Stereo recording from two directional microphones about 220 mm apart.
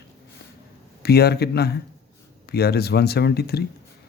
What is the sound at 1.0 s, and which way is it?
Speech, 45° left (ahead or behind).